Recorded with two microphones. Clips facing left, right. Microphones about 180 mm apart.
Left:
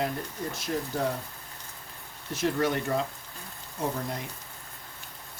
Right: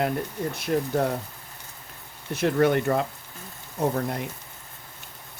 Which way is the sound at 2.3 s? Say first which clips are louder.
Right 6 dB; 60° right (ahead or behind).